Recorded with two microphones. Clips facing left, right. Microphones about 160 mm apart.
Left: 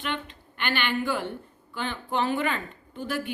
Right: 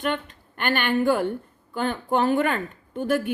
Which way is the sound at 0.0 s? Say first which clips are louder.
Right 6 dB; 45° right (ahead or behind).